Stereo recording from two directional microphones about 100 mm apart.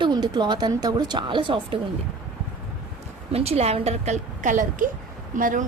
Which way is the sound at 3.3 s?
90° right.